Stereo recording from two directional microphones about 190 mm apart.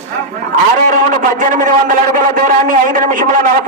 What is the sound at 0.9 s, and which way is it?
Speech, 45° right (ahead or behind).